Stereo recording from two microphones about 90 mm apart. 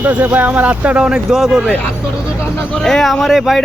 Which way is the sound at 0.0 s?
20° right (ahead or behind).